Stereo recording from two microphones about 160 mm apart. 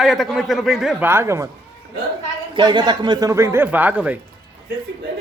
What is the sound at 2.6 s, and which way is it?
Speech, 30° right (ahead or behind).